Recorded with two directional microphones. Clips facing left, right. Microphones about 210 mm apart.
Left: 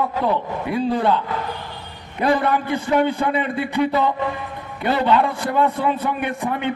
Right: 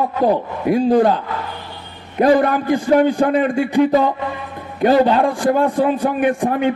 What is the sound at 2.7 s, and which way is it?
Speech, 50° right (ahead or behind).